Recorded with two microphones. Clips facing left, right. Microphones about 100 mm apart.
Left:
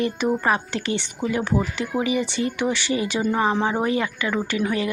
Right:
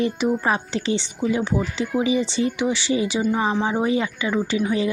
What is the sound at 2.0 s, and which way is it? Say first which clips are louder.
A woman's voice: right 2 dB; 25° right (ahead or behind).